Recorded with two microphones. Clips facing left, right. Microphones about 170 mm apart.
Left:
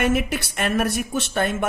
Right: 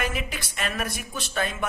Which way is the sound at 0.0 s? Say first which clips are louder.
Left 9 dB; 65° left (ahead or behind).